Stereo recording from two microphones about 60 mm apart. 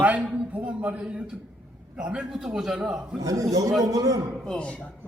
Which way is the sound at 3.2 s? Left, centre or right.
Right.